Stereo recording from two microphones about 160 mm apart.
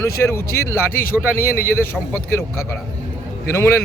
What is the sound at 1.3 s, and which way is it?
Speech, 65° left (ahead or behind).